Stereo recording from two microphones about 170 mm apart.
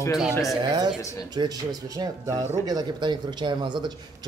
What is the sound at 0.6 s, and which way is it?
A man's voice, 25° right (ahead or behind).